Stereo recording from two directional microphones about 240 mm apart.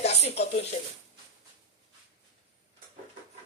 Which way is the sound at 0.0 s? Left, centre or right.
Left.